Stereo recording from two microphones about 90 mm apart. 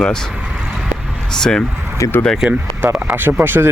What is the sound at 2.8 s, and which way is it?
Speech, 25° right (ahead or behind).